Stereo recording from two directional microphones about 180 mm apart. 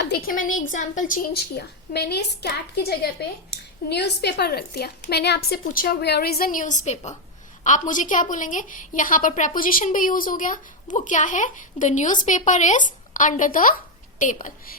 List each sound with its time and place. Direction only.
0.0 s a sound: 55° left (ahead or behind)
0.5 s a woman's voice: 45° left (ahead or behind)
1.5 s a woman's voice: 65° left (ahead or behind); by 14.5 s 45° left (ahead or behind)